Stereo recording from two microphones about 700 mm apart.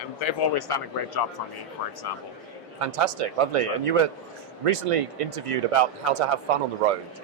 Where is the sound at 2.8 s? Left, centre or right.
Right.